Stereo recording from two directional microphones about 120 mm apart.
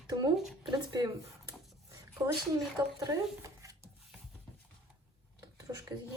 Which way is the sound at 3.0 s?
30° right (ahead or behind).